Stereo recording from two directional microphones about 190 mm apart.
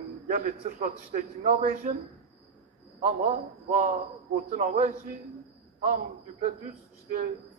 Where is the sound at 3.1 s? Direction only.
50° right (ahead or behind).